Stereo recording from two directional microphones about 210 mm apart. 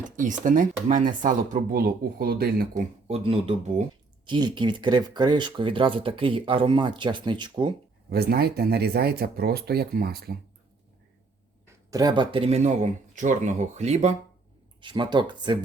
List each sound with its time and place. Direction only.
0.2 s speech: 40° right (ahead or behind)
3.1 s speech: 25° right (ahead or behind)
8.1 s speech: 50° right (ahead or behind)
11.6 s speech: 15° right (ahead or behind)